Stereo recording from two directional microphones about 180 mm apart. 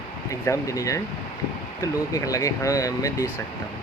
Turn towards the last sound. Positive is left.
turn(degrees=20)  # may be behind; listen again after turning